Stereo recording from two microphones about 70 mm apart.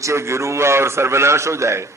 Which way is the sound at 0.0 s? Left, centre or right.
Right.